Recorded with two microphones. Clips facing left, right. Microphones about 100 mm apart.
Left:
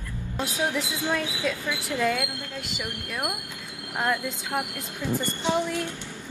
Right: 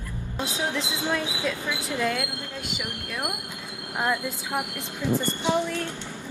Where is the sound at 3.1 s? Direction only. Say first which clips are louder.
Left 1 dB; 15° left (ahead or behind).